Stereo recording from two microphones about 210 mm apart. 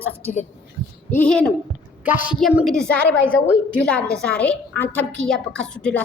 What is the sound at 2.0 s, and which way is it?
A woman's voice, 5° right (ahead or behind).